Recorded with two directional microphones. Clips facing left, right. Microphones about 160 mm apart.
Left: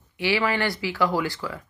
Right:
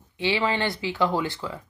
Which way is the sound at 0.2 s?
20° right (ahead or behind).